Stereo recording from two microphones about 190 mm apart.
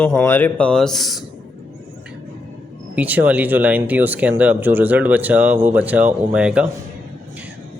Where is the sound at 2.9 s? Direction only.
10° right (ahead or behind).